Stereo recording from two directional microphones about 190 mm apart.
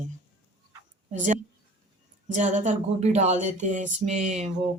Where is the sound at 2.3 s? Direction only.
40° right (ahead or behind).